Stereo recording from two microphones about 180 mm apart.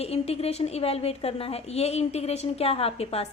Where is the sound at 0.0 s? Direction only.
35° left (ahead or behind).